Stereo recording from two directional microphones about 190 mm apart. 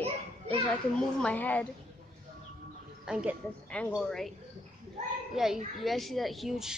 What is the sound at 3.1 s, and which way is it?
A woman's voice, 5° right (ahead or behind).